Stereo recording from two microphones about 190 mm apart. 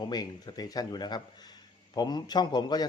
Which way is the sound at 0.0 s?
20° left (ahead or behind).